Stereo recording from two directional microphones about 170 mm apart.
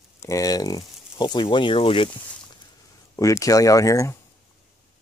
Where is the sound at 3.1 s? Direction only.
20° left (ahead or behind).